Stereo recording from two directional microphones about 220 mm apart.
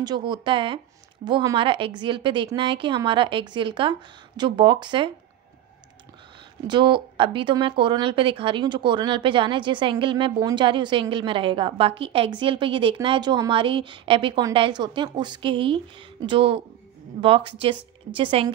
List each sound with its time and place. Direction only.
0.0 s speech: 20° right (ahead or behind)
6.7 s speech: 20° right (ahead or behind)